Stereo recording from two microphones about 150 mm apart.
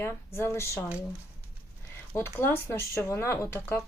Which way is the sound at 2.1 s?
15° left (ahead or behind).